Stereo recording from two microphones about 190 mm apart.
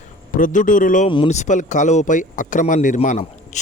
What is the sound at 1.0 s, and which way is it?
A man's voice, 30° left (ahead or behind).